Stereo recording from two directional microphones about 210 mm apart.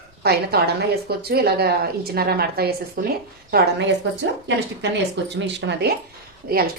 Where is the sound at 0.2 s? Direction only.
50° right (ahead or behind).